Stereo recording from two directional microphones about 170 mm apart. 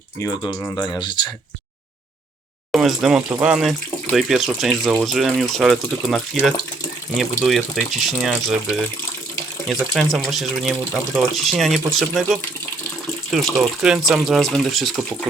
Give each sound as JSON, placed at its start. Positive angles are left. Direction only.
{"t": 0.2, "sound": "speech", "side_deg": 15}
{"t": 2.7, "sound": "speech", "side_deg": 0}
{"t": 13.3, "sound": "speech", "side_deg": 0}